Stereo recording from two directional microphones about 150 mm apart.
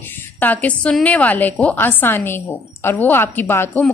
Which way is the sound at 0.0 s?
10° left (ahead or behind).